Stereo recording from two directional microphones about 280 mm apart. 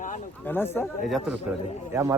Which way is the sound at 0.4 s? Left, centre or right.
Centre.